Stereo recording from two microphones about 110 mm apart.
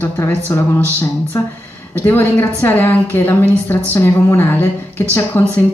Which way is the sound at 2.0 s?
20° left (ahead or behind).